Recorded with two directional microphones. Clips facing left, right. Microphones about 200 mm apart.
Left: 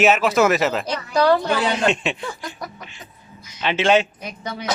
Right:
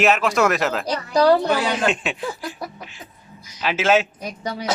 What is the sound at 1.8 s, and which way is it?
Speech, centre (ahead or behind).